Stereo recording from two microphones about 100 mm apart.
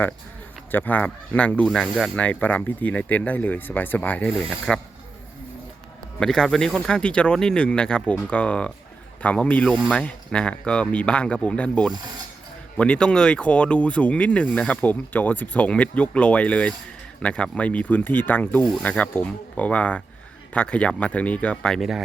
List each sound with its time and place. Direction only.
0.7 s speech: 20° left (ahead or behind); by 2.1 s centre (ahead or behind)
2.1 s speech: 15° left (ahead or behind)
6.1 s speech: 5° left (ahead or behind)